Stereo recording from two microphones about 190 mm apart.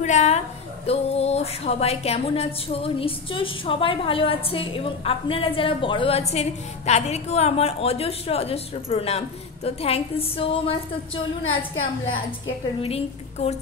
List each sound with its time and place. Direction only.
0.0 s a woman's voice: 35° left (ahead or behind)
12.8 s a woman's voice: 35° left (ahead or behind)